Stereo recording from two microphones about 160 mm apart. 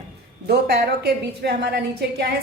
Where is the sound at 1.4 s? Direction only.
90° right.